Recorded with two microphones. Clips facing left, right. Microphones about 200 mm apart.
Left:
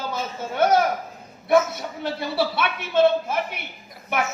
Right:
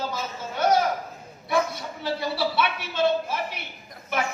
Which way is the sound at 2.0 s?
55° left (ahead or behind).